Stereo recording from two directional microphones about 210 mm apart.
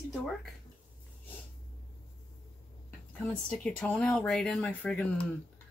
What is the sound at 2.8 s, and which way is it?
Speech, 10° left (ahead or behind).